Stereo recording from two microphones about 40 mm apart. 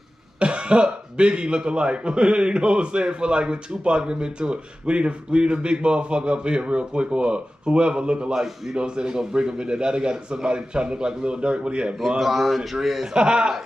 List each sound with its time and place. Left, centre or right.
0.4 s speech: right
8.3 s a man's voice: centre
8.7 s speech: right
12.2 s speech: centre
13.0 s speech: right